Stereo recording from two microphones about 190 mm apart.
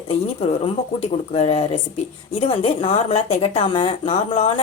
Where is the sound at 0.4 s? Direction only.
30° left (ahead or behind).